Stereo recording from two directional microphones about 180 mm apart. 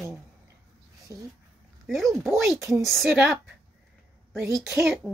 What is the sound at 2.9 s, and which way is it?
Speech, centre (ahead or behind).